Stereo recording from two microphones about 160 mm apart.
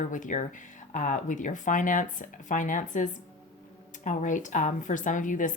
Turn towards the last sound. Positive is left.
turn(degrees=55)  # may be behind; listen again after turning